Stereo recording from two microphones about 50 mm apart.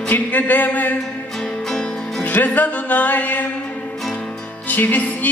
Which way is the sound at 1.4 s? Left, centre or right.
Centre.